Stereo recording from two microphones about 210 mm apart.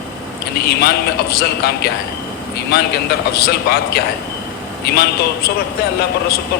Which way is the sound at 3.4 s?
50° left (ahead or behind).